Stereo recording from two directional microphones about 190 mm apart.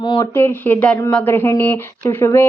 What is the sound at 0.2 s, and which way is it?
Speech, 10° left (ahead or behind).